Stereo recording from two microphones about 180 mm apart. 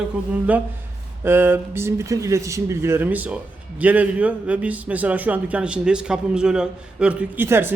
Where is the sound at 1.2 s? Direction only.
10° right (ahead or behind).